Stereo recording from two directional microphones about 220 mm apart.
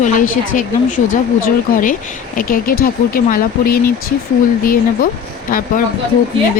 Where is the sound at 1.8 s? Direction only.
35° left (ahead or behind).